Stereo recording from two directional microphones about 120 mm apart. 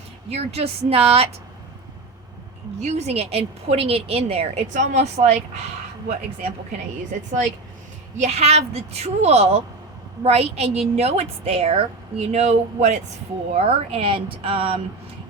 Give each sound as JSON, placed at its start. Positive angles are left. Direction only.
{"t": 0.3, "sound": "a woman's voice", "side_deg": -60}
{"t": 2.8, "sound": "a woman's voice", "side_deg": -60}
{"t": 8.1, "sound": "a woman's voice", "side_deg": -70}
{"t": 13.5, "sound": "speech", "side_deg": -60}